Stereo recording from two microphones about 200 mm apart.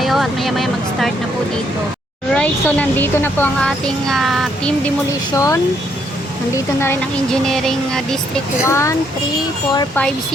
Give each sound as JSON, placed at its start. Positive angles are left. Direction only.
{"t": 0.0, "sound": "speech", "side_deg": 0}
{"t": 2.3, "sound": "speech", "side_deg": 5}
{"t": 5.3, "sound": "speech", "side_deg": 15}
{"t": 6.7, "sound": "speech", "side_deg": 10}
{"t": 8.6, "sound": "speech", "side_deg": 15}